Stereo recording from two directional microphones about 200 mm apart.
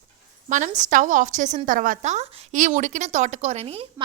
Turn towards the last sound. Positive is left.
turn(degrees=-30)  # may be behind; listen again after turning